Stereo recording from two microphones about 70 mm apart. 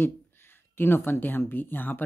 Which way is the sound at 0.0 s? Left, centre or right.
Left.